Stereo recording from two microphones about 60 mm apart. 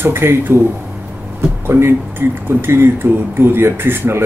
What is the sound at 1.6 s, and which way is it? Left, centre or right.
Speech, right.